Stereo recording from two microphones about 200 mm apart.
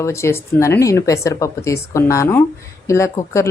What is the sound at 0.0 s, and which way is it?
A woman's voice, 15° left (ahead or behind).